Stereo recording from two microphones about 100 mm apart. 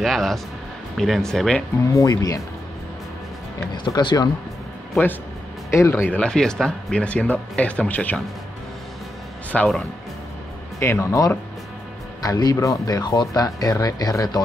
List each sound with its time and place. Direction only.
0.0 s speech: centre (ahead or behind)
1.9 s speech: 35° left (ahead or behind)
3.7 s speech: 50° left (ahead or behind)
5.7 s speech: 25° left (ahead or behind)
9.5 s speech: 10° left (ahead or behind)
10.8 s speech: 30° left (ahead or behind)